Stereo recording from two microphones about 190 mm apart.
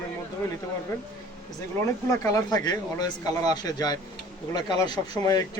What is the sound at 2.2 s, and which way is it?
A man's voice, 20° left (ahead or behind).